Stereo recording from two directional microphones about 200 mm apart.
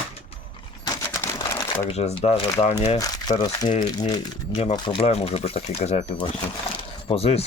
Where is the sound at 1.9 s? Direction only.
30° left (ahead or behind).